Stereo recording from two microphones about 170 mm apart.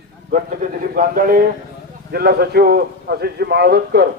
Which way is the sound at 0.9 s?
55° right (ahead or behind).